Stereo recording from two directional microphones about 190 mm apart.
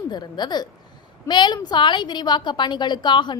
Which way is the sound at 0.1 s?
20° left (ahead or behind).